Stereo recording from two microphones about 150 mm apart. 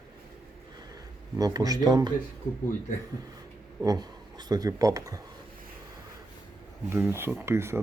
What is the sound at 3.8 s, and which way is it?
Speech, 25° right (ahead or behind).